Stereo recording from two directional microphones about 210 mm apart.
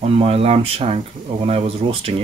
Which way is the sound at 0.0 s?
30° right (ahead or behind).